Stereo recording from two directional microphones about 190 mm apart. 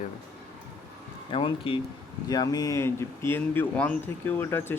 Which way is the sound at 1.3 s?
25° left (ahead or behind).